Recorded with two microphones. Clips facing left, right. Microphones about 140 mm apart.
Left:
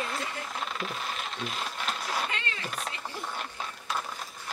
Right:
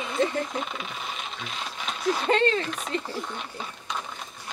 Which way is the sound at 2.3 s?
35° right (ahead or behind).